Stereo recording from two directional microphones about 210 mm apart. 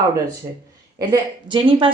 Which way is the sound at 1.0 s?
20° right (ahead or behind).